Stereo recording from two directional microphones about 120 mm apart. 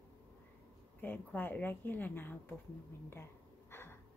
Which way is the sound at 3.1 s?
20° left (ahead or behind).